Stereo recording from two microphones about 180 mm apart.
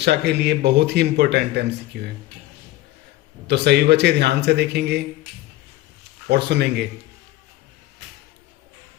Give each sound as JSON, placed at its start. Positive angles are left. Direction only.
{"t": 0.0, "sound": "speech", "side_deg": -70}
{"t": 3.4, "sound": "speech", "side_deg": -70}
{"t": 6.2, "sound": "speech", "side_deg": -65}